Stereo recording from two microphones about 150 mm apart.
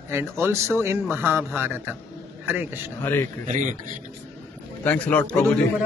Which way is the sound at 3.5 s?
55° right (ahead or behind).